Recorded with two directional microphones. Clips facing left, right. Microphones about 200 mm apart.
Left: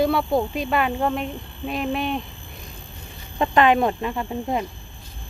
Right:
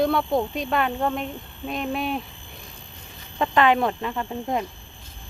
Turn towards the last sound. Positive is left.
turn(degrees=10)  # may be behind; listen again after turning